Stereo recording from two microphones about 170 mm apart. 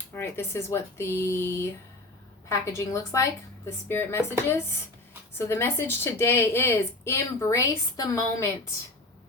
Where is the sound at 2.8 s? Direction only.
20° left (ahead or behind).